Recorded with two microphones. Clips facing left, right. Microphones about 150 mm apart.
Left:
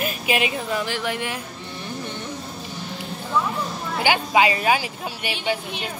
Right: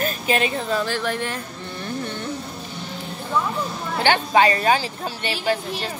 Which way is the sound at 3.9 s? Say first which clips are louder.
Right 2 dB; 10° left (ahead or behind).